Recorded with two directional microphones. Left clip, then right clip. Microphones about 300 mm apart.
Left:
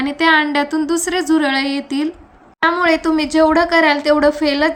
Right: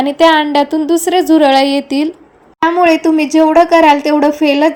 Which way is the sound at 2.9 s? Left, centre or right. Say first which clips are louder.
Right 5 dB; centre.